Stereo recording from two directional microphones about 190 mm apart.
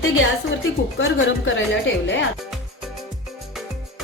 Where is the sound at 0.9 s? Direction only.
90° left.